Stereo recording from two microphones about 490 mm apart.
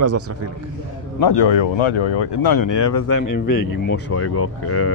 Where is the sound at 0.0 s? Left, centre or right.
Right.